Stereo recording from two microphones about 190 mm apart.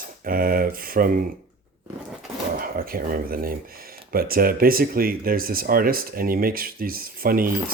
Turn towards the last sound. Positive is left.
turn(degrees=-50)  # may be behind; listen again after turning